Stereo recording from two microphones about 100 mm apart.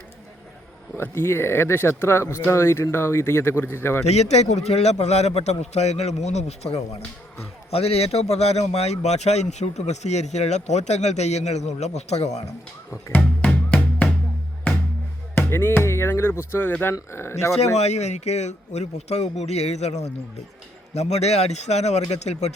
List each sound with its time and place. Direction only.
0.9 s speech: 25° left (ahead or behind)
4.0 s a man's voice: 90° left
12.9 s speech: 25° left (ahead or behind)
13.4 s music: 15° left (ahead or behind)
15.4 s speech: 20° left (ahead or behind)
17.6 s a man's voice: 90° left